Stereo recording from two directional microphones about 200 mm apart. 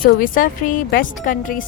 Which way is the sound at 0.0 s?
45° left (ahead or behind).